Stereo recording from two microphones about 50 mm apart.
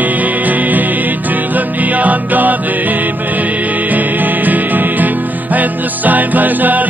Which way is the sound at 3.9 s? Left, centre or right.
Right.